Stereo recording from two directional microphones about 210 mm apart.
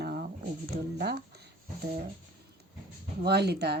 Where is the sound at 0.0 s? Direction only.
45° right (ahead or behind).